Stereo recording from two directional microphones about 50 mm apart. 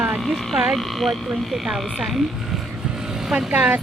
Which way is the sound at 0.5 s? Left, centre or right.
Centre.